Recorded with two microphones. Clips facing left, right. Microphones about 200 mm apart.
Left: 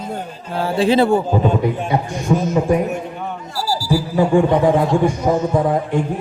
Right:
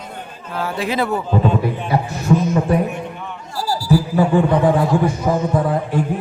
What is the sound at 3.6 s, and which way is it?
A man's voice, 10° left (ahead or behind).